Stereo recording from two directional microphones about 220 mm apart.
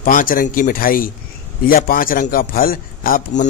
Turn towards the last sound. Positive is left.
turn(degrees=35)  # may be behind; listen again after turning